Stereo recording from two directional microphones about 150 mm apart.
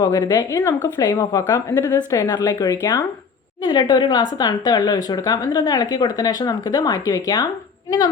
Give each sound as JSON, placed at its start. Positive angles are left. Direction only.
{"t": 0.0, "sound": "speech", "side_deg": 30}